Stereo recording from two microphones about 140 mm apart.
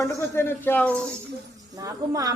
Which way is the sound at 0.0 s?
15° left (ahead or behind).